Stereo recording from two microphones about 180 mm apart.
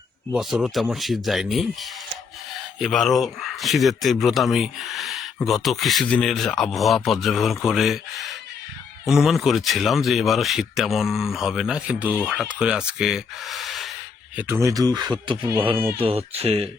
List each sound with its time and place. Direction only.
0.3 s speech: centre (ahead or behind)
14.3 s speech: 10° right (ahead or behind); by 16.6 s 35° right (ahead or behind)